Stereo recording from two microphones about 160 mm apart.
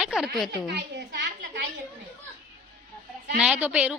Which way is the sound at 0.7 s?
90° right.